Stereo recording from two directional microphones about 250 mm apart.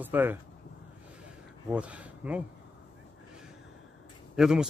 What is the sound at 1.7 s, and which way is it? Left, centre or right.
Speech, centre.